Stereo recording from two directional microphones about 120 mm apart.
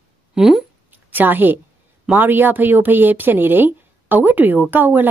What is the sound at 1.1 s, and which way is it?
Speech, 15° right (ahead or behind).